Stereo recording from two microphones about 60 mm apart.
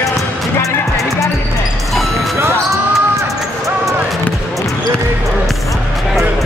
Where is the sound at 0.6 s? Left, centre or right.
Left.